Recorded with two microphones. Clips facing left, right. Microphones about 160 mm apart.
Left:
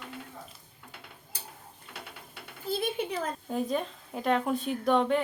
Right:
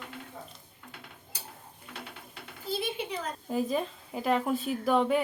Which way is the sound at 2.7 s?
50° left (ahead or behind).